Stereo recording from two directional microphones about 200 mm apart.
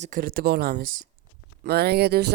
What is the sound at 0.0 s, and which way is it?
Speech, 45° right (ahead or behind).